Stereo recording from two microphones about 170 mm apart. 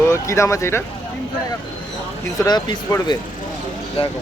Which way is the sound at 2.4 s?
20° left (ahead or behind).